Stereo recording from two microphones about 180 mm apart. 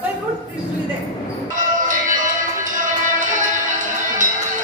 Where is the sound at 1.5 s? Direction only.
45° right (ahead or behind).